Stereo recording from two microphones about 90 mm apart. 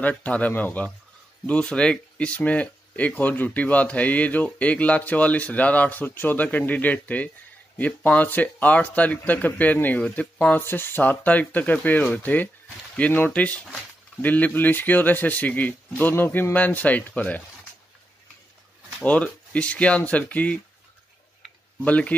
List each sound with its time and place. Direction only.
0.0 s speech: 15° left (ahead or behind)
19.0 s speech: 15° left (ahead or behind)
21.8 s speech: 15° left (ahead or behind)